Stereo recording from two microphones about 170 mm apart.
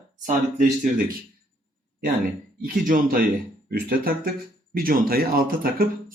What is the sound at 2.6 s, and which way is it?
Speech, 55° right (ahead or behind).